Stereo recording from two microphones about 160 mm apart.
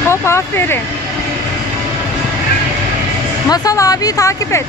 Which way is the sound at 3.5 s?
20° left (ahead or behind).